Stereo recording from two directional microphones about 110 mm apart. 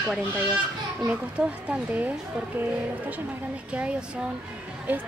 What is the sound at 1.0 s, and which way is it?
Speech, 10° right (ahead or behind).